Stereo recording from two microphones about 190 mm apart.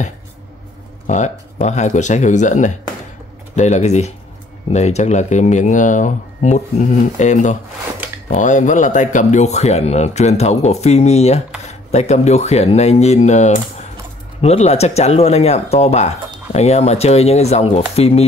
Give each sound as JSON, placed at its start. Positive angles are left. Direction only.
{"t": 1.0, "sound": "speech", "side_deg": 40}